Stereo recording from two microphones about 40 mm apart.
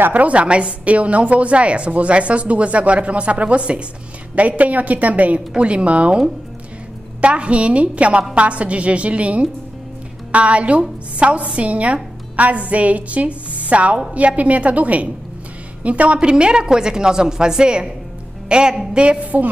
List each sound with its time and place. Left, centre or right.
0.1 s a woman's voice: right
5.6 s a woman's voice: right
7.2 s a woman's voice: right